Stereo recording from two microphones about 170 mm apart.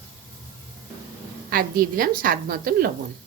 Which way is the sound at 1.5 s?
60° right (ahead or behind).